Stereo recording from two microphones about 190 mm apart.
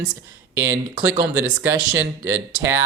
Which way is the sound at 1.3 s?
10° right (ahead or behind).